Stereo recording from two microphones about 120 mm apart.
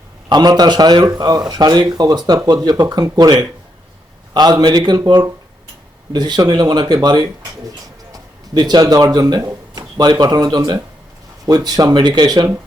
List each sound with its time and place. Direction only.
0.3 s speech: 35° right (ahead or behind)